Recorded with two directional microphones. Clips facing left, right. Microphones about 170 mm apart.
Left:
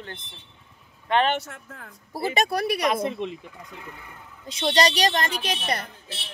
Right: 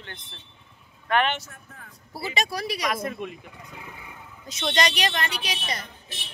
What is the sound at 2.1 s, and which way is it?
Speech, 50° left (ahead or behind).